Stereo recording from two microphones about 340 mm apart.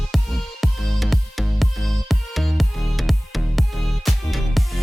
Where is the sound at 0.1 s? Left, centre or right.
Centre.